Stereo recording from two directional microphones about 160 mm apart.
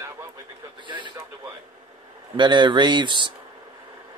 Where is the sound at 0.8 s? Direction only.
30° right (ahead or behind).